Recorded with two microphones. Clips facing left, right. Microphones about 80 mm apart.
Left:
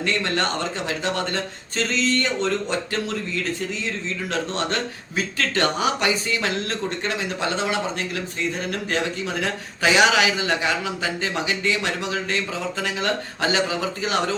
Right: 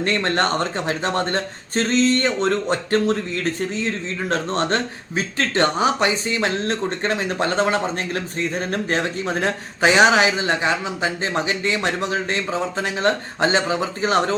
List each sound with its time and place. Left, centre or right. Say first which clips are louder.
0.0 s speech: right 3 dB; right